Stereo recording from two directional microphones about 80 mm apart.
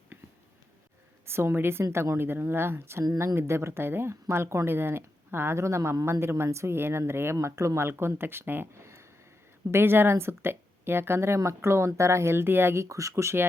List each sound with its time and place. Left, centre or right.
1.2 s speech: right